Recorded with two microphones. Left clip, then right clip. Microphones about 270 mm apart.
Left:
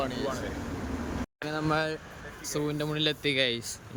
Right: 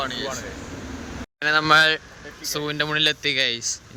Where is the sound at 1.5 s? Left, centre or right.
Centre.